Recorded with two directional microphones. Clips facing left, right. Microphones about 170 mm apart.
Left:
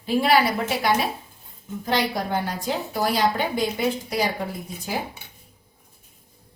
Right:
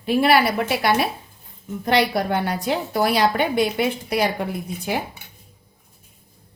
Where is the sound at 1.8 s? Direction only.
70° right (ahead or behind).